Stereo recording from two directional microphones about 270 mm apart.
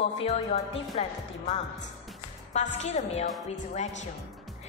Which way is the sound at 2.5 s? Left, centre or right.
Left.